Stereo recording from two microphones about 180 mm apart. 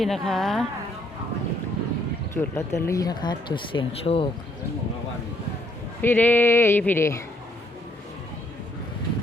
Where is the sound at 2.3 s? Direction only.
15° left (ahead or behind); by 4.3 s 30° left (ahead or behind).